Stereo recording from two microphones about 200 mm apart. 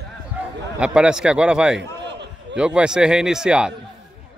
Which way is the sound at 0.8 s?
5° right (ahead or behind).